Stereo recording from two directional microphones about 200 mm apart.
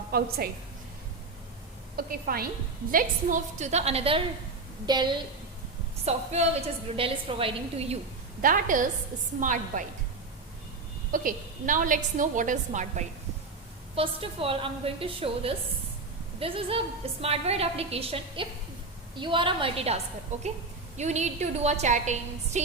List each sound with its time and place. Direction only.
0.1 s a woman's voice: 50° right (ahead or behind)
2.0 s a woman's voice: 50° right (ahead or behind); by 5.1 s 20° right (ahead or behind)
6.1 s a woman's voice: 30° right (ahead or behind)
8.4 s a woman's voice: 40° right (ahead or behind)
11.1 s a woman's voice: 45° right (ahead or behind)
13.9 s a woman's voice: 25° right (ahead or behind)